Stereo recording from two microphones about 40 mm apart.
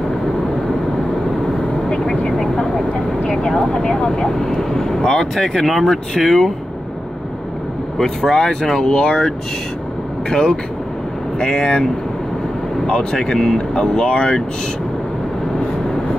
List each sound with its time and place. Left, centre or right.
2.2 s vehicle: left
3.3 s speech: left; by 6.5 s centre
8.0 s speech: centre
10.3 s speech: left